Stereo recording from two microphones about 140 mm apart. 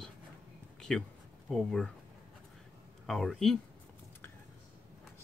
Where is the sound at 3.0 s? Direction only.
Centre (ahead or behind).